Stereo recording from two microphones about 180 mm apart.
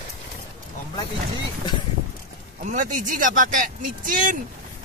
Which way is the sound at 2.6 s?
45° right (ahead or behind).